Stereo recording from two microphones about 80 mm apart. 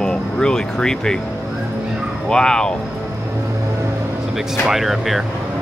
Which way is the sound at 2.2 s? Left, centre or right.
Centre.